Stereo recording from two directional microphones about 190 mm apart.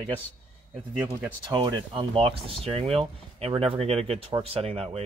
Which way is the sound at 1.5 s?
25° right (ahead or behind).